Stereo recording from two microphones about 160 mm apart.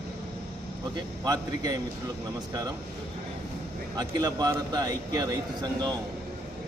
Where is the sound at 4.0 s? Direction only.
25° right (ahead or behind).